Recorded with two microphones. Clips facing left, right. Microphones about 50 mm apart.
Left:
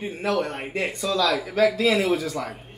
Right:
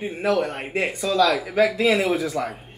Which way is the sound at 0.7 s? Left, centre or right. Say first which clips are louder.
Right 3 dB; centre.